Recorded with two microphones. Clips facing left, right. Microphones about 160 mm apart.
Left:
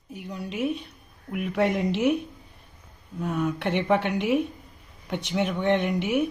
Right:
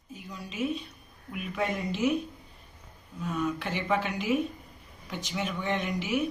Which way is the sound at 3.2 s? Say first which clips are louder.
Left 4 dB; 60° left (ahead or behind).